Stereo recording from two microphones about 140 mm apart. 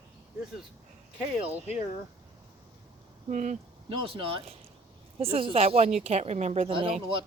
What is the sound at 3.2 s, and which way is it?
Speech, 60° right (ahead or behind).